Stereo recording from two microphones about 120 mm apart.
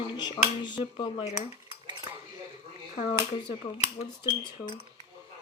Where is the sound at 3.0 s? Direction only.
60° left (ahead or behind).